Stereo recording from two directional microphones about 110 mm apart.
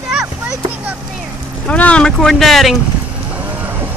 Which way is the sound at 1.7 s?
10° left (ahead or behind).